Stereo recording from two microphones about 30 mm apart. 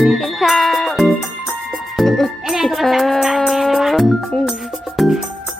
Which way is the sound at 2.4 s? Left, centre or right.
Centre.